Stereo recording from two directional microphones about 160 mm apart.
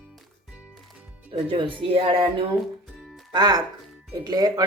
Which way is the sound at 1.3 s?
35° right (ahead or behind).